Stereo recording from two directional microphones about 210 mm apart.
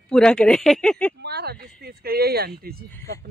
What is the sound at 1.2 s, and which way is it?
Speech, 50° right (ahead or behind).